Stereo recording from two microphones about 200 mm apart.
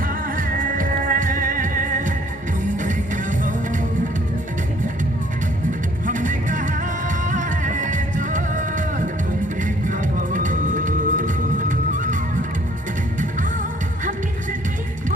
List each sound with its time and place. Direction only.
0.3 s music: 45° right (ahead or behind)
6.1 s music: 40° right (ahead or behind)